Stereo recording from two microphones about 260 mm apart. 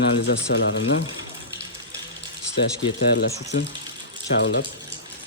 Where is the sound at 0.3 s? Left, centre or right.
Left.